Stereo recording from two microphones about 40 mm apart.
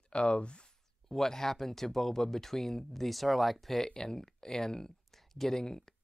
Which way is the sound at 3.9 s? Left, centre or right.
Centre.